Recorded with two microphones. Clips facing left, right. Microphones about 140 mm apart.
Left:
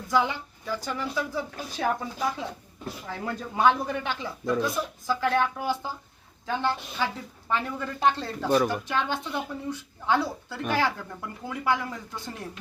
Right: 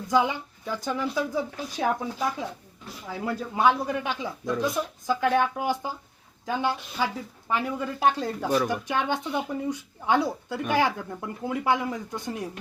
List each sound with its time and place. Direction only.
0.1 s speech: 15° right (ahead or behind)
3.1 s speech: 5° right (ahead or behind)